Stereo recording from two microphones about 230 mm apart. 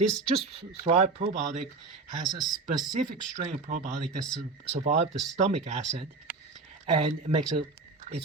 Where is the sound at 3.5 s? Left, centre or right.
Right.